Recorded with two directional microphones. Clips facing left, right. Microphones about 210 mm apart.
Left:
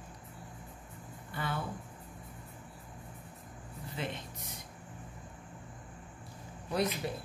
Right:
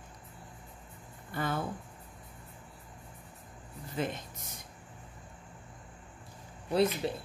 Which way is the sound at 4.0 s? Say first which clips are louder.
Right 5 dB; 45° right (ahead or behind).